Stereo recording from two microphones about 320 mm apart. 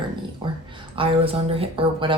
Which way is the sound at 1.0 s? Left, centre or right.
Centre.